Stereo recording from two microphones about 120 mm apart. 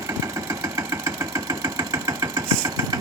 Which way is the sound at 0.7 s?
25° right (ahead or behind).